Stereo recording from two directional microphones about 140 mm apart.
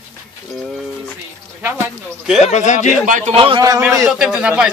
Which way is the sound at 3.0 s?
65° right (ahead or behind).